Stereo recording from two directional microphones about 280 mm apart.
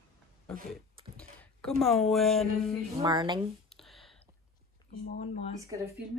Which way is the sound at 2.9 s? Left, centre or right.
Centre.